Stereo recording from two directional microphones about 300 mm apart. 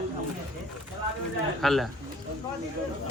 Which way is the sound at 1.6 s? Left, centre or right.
Centre.